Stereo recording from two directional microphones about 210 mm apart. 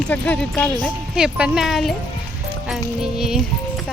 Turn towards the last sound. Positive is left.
turn(degrees=0)  # may be behind; listen again after turning